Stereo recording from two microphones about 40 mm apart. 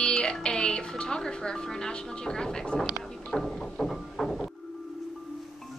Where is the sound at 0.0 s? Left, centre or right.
Left.